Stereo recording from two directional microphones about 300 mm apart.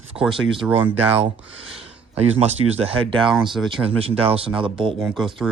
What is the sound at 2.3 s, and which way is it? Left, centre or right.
Speech, centre.